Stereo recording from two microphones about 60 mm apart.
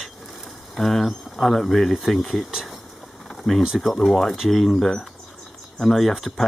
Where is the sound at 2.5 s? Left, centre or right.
Centre.